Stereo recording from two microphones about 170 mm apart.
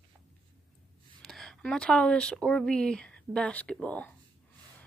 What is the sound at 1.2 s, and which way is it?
Speech, centre (ahead or behind).